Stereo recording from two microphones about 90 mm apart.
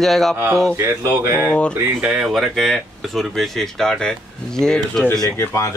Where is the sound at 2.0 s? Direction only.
10° right (ahead or behind).